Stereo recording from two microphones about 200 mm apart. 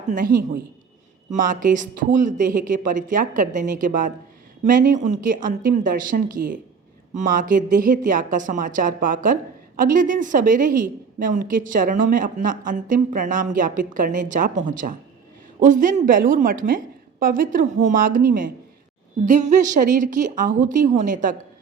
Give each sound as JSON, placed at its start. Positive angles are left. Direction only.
{"t": 0.1, "sound": "a woman's voice", "side_deg": -45}